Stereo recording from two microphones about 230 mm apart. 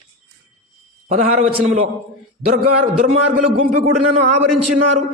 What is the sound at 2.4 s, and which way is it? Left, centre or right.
A man's voice, right.